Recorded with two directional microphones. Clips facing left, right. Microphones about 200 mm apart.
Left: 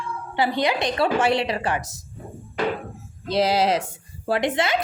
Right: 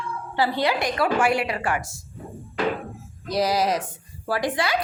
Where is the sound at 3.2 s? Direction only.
25° left (ahead or behind).